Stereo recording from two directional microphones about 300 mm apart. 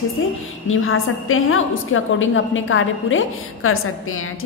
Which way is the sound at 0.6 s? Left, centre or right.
Left.